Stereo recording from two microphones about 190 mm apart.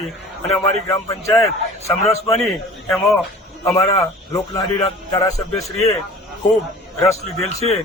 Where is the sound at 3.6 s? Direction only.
15° left (ahead or behind).